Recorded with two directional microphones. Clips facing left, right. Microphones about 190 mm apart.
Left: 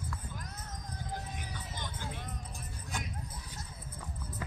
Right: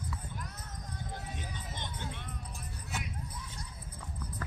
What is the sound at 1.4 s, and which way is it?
Music, 25° right (ahead or behind).